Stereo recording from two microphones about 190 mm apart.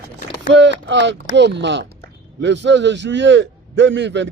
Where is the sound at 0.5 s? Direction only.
70° right (ahead or behind).